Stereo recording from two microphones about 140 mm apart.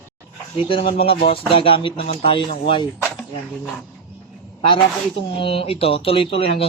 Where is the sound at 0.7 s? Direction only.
40° left (ahead or behind).